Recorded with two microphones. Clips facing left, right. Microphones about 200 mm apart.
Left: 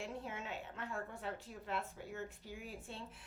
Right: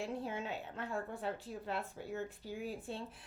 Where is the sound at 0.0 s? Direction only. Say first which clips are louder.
Right 5 dB; 35° right (ahead or behind).